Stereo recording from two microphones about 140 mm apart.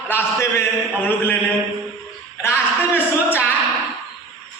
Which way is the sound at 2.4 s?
15° left (ahead or behind).